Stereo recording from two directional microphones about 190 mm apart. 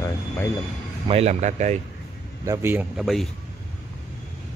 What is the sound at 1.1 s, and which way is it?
Speech, 35° right (ahead or behind).